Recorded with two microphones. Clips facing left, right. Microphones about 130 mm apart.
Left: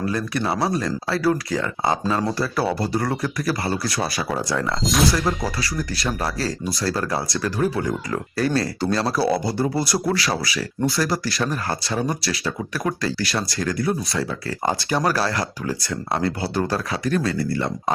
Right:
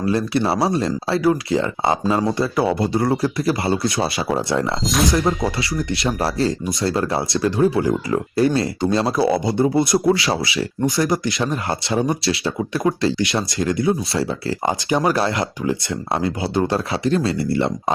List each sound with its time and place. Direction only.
0.0 s speech: 30° right (ahead or behind)
14.6 s speech: 15° right (ahead or behind)